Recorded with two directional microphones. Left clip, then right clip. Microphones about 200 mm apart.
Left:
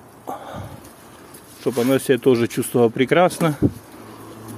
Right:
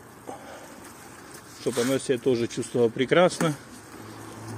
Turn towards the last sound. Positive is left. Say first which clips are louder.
# left 4 dB
turn(degrees=20)  # may be behind; listen again after turning